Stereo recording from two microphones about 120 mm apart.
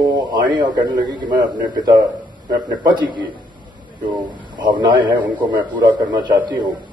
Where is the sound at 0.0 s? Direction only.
35° right (ahead or behind).